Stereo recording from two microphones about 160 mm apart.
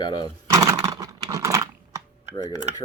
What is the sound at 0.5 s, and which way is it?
Computer keyboard, 20° right (ahead or behind).